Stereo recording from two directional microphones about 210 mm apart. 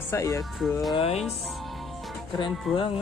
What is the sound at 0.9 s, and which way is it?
Music, 30° left (ahead or behind).